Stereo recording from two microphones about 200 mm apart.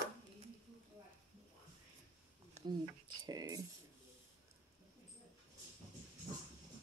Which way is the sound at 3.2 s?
20° right (ahead or behind).